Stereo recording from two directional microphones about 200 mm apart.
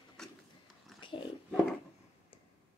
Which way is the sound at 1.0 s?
25° left (ahead or behind).